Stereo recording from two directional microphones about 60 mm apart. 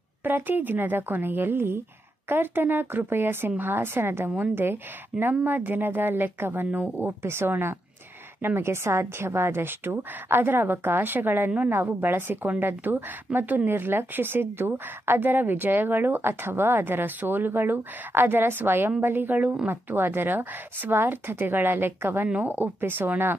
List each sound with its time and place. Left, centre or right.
0.2 s a woman's voice: right
7.2 s a woman's voice: right